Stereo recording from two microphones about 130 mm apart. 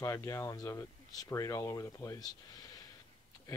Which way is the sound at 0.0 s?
25° left (ahead or behind).